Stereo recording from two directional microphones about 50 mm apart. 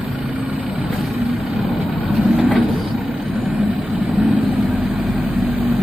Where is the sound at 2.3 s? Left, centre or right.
Right.